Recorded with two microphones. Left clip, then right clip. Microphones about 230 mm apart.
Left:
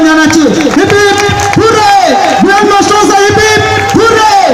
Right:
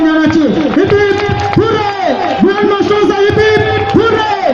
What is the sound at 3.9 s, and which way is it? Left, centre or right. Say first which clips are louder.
Music: left 7 dB; left.